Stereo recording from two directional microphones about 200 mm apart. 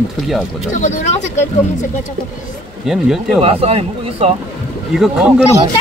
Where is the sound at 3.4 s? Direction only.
30° right (ahead or behind).